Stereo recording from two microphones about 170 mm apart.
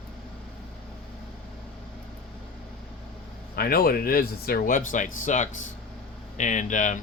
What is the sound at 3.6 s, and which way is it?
Speech, 60° left (ahead or behind).